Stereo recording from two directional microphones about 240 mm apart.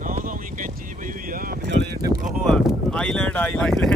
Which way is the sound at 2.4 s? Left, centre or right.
Centre.